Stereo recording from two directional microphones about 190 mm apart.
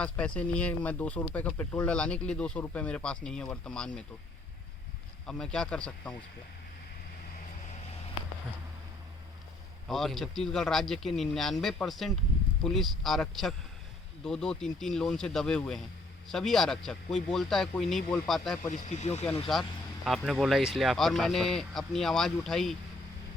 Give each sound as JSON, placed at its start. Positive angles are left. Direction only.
{"t": 0.0, "sound": "speech", "side_deg": 5}
{"t": 5.2, "sound": "speech", "side_deg": 5}
{"t": 9.9, "sound": "speech", "side_deg": 0}
{"t": 18.7, "sound": "speech", "side_deg": 35}
{"t": 19.5, "sound": "speech", "side_deg": 0}